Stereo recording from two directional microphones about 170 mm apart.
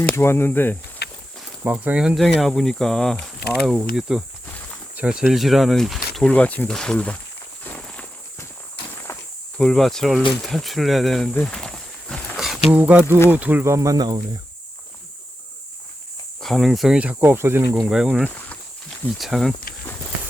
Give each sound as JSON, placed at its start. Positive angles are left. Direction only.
{"t": 0.0, "sound": "speech", "side_deg": 10}
{"t": 1.0, "sound": "a sound", "side_deg": 70}
{"t": 1.4, "sound": "speech", "side_deg": -10}
{"t": 7.6, "sound": "walk", "side_deg": 5}
{"t": 9.1, "sound": "insect", "side_deg": 15}
{"t": 9.6, "sound": "speech", "side_deg": 5}
{"t": 10.4, "sound": "a sound", "side_deg": 0}
{"t": 12.7, "sound": "speech", "side_deg": -10}
{"t": 16.4, "sound": "speech", "side_deg": 0}